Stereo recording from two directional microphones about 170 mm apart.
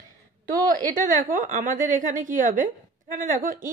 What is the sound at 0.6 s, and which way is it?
A woman's voice, 50° right (ahead or behind).